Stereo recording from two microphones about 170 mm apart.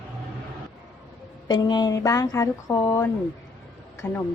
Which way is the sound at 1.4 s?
25° left (ahead or behind).